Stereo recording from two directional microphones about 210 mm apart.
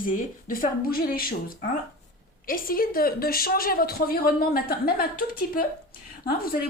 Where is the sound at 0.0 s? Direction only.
40° left (ahead or behind).